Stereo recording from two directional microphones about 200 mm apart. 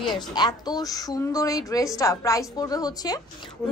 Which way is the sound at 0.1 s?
20° left (ahead or behind).